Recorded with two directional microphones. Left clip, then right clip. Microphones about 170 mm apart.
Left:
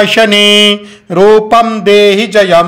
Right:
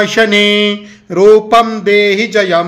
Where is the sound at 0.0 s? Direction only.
25° left (ahead or behind).